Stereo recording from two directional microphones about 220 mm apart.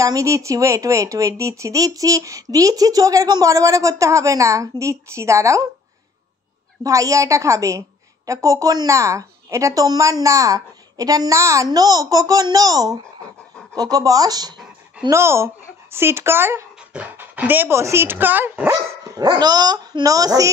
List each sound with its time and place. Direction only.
0.0 s speech: 15° right (ahead or behind)
6.8 s speech: 15° right (ahead or behind)